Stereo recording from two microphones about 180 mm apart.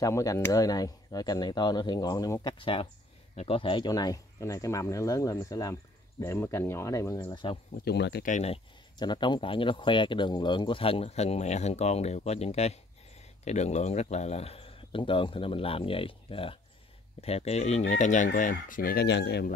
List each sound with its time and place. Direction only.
0.0 s speech: 20° left (ahead or behind)
7.7 s speech: 65° left (ahead or behind)
8.3 s speech: 40° left (ahead or behind)
8.9 s speech: 25° left (ahead or behind); by 19.5 s 70° left (ahead or behind)